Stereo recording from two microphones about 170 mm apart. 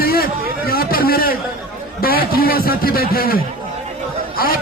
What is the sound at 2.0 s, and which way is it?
A man's voice, 60° left (ahead or behind).